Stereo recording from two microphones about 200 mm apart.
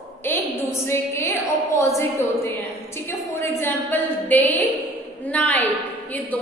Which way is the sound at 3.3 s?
10° left (ahead or behind).